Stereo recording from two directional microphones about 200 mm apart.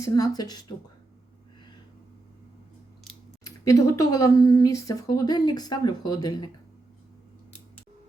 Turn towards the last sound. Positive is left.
turn(degrees=20)  # may be behind; listen again after turning